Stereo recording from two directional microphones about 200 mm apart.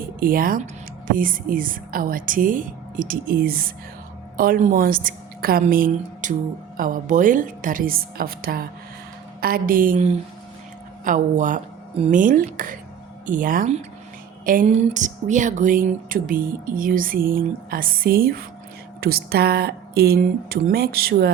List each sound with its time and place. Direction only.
0.2 s a woman's voice: 45° right (ahead or behind)